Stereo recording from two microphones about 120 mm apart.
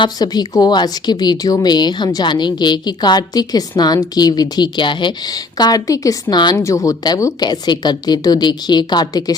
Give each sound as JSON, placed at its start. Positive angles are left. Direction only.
{"t": 0.0, "sound": "speech", "side_deg": 35}